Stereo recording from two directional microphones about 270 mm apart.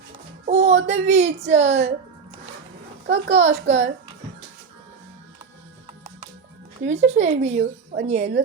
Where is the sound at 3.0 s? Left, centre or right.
Right.